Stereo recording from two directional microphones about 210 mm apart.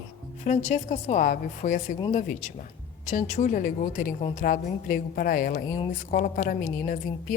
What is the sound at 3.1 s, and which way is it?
A woman's voice, 35° left (ahead or behind).